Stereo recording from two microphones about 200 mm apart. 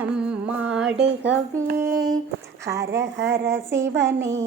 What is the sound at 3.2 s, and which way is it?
Speech, 60° right (ahead or behind).